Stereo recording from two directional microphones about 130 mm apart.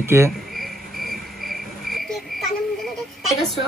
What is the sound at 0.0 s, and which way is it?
Speech, 20° right (ahead or behind).